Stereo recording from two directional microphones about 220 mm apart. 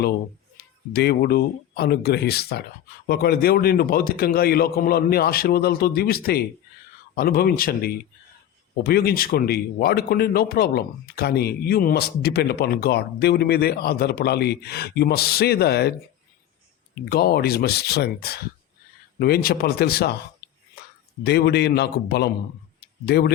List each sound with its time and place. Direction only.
0.5 s speech: 45° left (ahead or behind)
17.1 s speech: 45° left (ahead or behind)
21.2 s speech: 50° left (ahead or behind)